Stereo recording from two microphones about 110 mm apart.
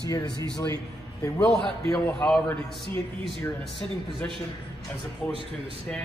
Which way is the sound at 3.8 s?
5° left (ahead or behind).